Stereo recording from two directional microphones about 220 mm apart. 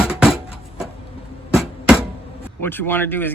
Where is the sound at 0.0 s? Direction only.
5° right (ahead or behind).